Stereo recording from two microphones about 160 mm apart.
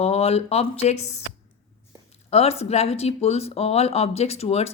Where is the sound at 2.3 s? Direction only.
40° left (ahead or behind).